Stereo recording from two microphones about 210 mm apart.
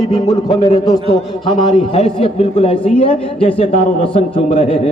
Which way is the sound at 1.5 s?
20° left (ahead or behind).